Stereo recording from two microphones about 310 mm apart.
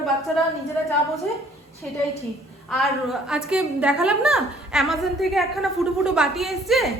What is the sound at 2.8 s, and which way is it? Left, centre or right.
A woman's voice, centre.